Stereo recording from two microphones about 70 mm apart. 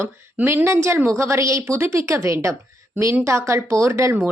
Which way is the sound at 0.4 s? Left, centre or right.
Right.